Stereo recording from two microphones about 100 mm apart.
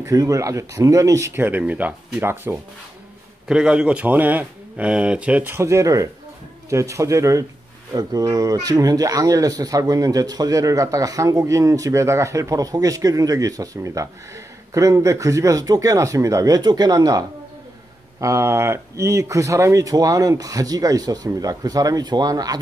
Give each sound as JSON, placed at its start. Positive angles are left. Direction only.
{"t": 0.0, "sound": "speech", "side_deg": -35}
{"t": 3.4, "sound": "speech", "side_deg": -10}
{"t": 5.5, "sound": "speech", "side_deg": -30}
{"t": 18.2, "sound": "speech", "side_deg": -30}